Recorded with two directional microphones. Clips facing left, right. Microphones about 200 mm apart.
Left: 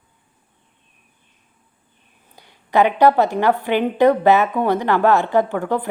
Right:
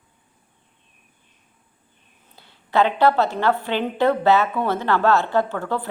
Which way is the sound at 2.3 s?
15° left (ahead or behind).